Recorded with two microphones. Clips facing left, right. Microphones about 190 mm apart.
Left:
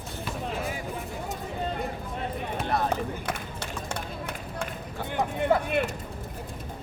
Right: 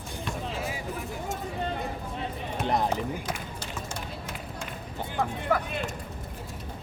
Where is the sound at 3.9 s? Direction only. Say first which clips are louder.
Left 3 dB; 60° left (ahead or behind).